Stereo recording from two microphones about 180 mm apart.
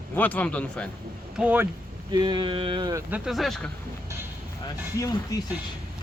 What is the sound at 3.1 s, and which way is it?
Speech, centre (ahead or behind).